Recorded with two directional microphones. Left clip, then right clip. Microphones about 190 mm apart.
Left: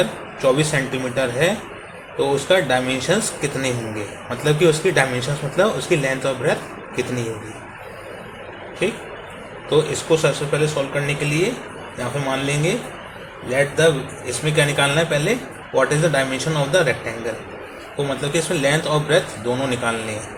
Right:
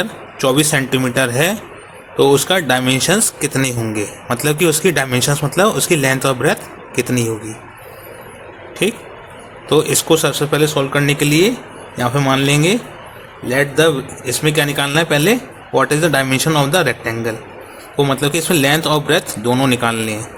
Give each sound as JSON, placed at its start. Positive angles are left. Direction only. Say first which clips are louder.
{"t": 0.0, "sound": "speech", "louder": "right 1 dB", "side_deg": -55}
{"t": 9.6, "sound": "a man's voice", "louder": "right 4 dB", "side_deg": -55}